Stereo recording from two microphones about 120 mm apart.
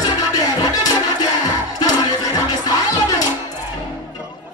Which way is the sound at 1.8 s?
35° left (ahead or behind).